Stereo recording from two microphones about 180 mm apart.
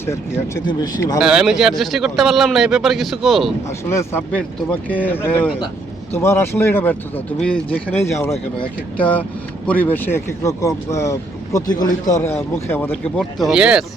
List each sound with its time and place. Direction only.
0.0 s speech: 15° left (ahead or behind)
1.2 s a man's voice: 5° right (ahead or behind)
3.8 s speech: 15° left (ahead or behind)
13.4 s a man's voice: 5° right (ahead or behind)